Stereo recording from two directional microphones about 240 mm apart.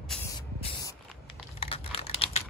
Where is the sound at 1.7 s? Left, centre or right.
Left.